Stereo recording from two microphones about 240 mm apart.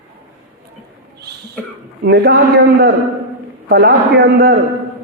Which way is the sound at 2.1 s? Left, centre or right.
Right.